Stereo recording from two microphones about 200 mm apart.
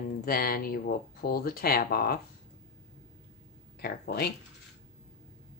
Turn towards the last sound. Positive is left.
turn(degrees=50)  # may be behind; listen again after turning